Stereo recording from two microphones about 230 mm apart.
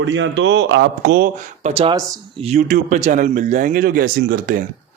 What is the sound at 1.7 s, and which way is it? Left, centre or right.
Speech, right.